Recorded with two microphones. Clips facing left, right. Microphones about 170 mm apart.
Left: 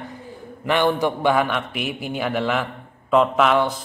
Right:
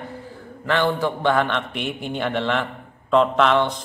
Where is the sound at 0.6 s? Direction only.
15° left (ahead or behind).